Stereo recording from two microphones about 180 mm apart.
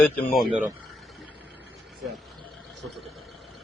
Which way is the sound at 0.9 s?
Centre (ahead or behind).